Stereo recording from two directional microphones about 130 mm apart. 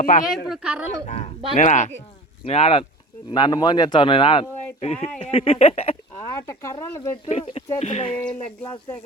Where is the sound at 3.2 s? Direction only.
35° left (ahead or behind); by 6.0 s 50° left (ahead or behind).